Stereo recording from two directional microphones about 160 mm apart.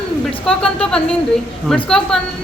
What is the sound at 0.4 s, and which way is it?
A woman's voice, 5° left (ahead or behind).